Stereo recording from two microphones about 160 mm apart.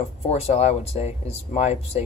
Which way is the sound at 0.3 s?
40° left (ahead or behind).